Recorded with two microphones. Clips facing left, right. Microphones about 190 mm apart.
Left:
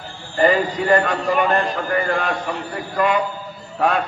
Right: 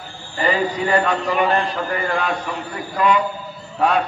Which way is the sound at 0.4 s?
45° left (ahead or behind).